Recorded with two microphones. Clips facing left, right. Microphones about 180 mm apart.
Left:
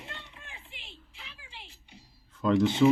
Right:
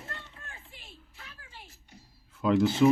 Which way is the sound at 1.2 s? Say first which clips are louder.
Even; 20° left (ahead or behind).